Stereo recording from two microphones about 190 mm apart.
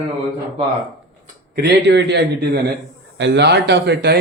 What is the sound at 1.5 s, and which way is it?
Speech, 60° right (ahead or behind).